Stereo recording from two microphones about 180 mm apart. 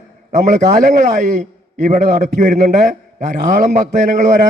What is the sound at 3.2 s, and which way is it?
A man's voice, 45° right (ahead or behind).